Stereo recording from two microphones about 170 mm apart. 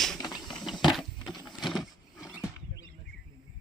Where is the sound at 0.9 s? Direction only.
Centre (ahead or behind).